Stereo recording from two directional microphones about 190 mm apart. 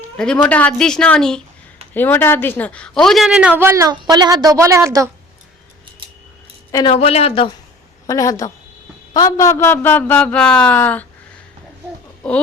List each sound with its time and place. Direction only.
0.2 s a woman's voice: 5° left (ahead or behind); by 5.0 s 15° right (ahead or behind)
6.7 s speech: 25° left (ahead or behind)
8.0 s a man's voice: 20° left (ahead or behind)